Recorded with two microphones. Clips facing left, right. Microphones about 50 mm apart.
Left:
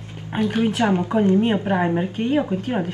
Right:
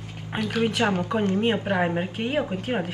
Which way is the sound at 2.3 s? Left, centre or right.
Centre.